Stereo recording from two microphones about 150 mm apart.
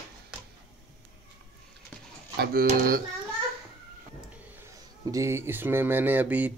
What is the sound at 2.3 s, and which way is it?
Speech, 85° right.